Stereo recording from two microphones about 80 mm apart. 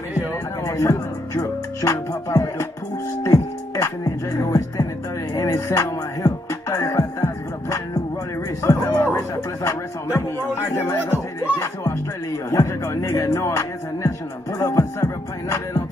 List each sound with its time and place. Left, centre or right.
0.7 s music: left
8.6 s speech: left
9.3 s music: left